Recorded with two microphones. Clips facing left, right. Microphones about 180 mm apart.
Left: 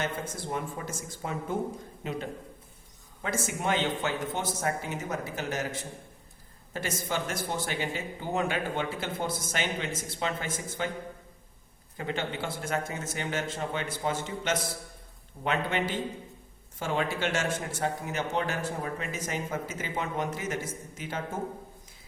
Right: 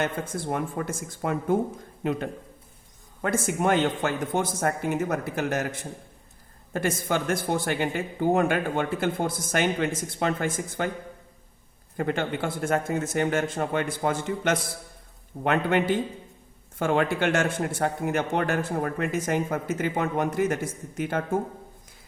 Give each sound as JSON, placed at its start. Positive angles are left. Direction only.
{"t": 0.4, "sound": "speech", "side_deg": -60}
{"t": 6.7, "sound": "speech", "side_deg": -55}
{"t": 11.9, "sound": "speech", "side_deg": -50}